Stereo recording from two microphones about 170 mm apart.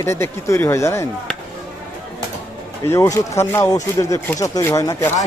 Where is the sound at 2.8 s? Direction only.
15° left (ahead or behind).